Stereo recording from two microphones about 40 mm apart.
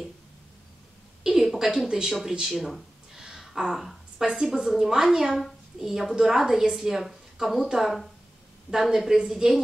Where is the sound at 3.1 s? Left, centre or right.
Centre.